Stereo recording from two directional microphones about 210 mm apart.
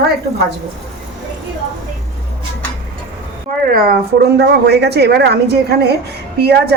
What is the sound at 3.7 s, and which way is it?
A woman's voice, 45° right (ahead or behind).